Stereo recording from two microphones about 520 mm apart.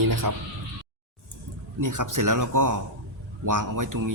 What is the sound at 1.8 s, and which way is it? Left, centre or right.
Speech, right.